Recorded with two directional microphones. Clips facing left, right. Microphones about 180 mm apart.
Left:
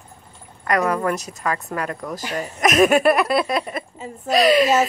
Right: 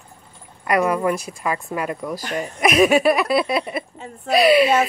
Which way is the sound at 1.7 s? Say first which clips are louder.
Right 1 dB; 10° right (ahead or behind).